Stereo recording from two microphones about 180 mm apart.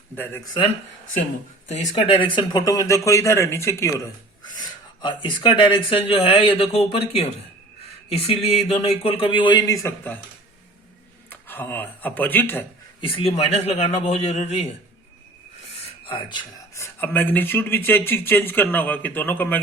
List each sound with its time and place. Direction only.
1.6 s speech: 40° left (ahead or behind); by 10.2 s 10° left (ahead or behind)
11.3 s speech: 10° left (ahead or behind)
13.1 s speech: 35° left (ahead or behind)
16.0 s speech: 30° left (ahead or behind)
16.7 s speech: 15° left (ahead or behind)